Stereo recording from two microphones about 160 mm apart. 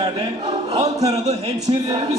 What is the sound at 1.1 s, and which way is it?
Speech, 40° right (ahead or behind).